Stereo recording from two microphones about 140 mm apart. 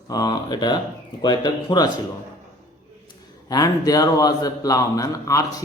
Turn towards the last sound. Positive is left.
turn(degrees=25)  # may be behind; listen again after turning